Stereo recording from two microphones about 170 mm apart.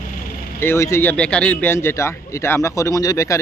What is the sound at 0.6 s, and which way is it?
A man's voice, 15° left (ahead or behind).